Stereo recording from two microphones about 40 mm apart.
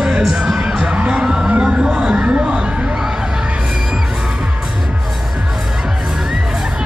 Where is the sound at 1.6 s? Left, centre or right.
Right.